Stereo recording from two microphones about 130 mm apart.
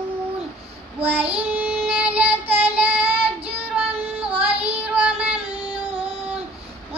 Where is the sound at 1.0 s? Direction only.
10° right (ahead or behind).